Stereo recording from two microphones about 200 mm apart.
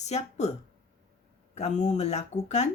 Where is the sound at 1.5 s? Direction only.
35° left (ahead or behind).